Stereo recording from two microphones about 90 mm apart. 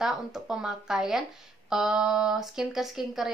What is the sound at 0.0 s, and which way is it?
Speech, 5° right (ahead or behind).